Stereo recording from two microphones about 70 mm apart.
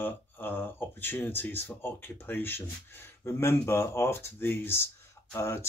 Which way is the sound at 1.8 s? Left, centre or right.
Left.